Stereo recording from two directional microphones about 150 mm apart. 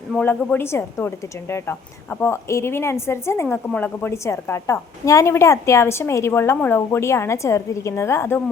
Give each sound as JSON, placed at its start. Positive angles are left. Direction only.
{"t": 0.2, "sound": "a woman's voice", "side_deg": 10}